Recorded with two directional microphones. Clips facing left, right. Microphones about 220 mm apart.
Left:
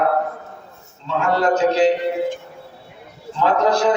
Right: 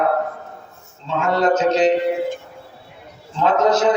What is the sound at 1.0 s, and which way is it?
Speech, 20° right (ahead or behind).